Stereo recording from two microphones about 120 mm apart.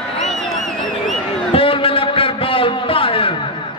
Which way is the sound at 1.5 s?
50° left (ahead or behind).